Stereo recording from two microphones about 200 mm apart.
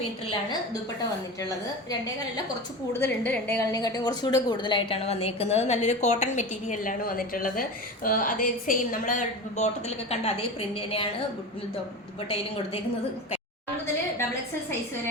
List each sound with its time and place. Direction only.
1.4 s a woman's voice: 20° left (ahead or behind)
3.0 s a woman's voice: 10° left (ahead or behind); by 9.6 s 40° left (ahead or behind)
10.1 s a woman's voice: 30° left (ahead or behind)